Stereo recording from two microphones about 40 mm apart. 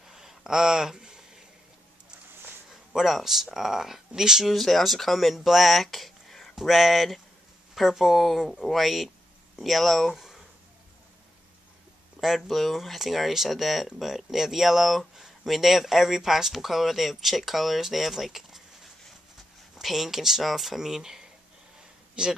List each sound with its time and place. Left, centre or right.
0.1 s a sound: centre
2.7 s speech: centre
4.5 s speech: centre
10.1 s a sound: centre
12.4 s speech: centre
19.7 s speech: centre
22.2 s speech: right